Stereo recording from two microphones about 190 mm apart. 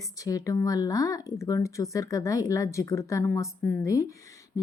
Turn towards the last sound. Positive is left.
turn(degrees=15)  # may be behind; listen again after turning